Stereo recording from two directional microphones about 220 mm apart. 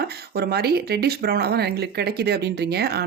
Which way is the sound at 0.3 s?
45° right (ahead or behind).